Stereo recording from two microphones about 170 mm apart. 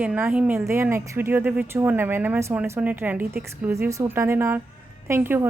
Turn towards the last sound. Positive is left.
turn(degrees=-10)  # may be behind; listen again after turning